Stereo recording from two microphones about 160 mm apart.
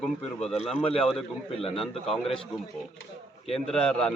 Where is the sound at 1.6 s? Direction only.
35° left (ahead or behind).